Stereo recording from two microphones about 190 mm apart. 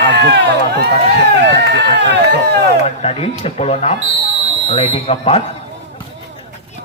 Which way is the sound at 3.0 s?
30° left (ahead or behind).